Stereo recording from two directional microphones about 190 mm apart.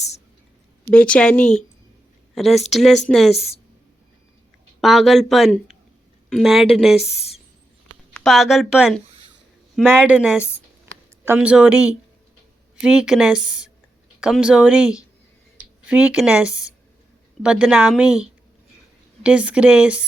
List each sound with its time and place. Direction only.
0.9 s speech: 5° left (ahead or behind)
3.3 s speech: 35° left (ahead or behind)
4.8 s speech: centre (ahead or behind)
7.1 s speech: 35° left (ahead or behind)
8.1 s speech: centre (ahead or behind)
12.8 s speech: 5° right (ahead or behind)